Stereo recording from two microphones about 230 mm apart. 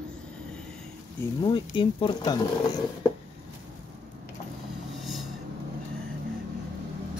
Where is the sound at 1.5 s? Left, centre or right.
Left.